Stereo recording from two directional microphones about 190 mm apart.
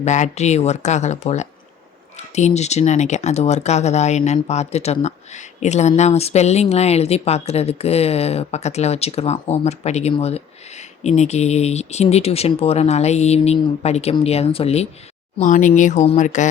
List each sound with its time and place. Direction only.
0.0 s speech: 40° left (ahead or behind)
15.4 s speech: 45° left (ahead or behind)